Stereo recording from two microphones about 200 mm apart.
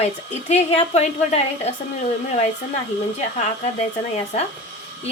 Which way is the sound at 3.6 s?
35° left (ahead or behind).